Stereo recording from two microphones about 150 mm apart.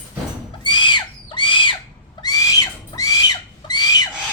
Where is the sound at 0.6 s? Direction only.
30° left (ahead or behind).